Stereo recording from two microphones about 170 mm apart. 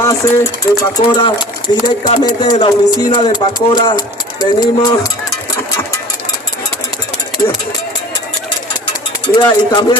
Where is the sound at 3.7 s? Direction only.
25° left (ahead or behind).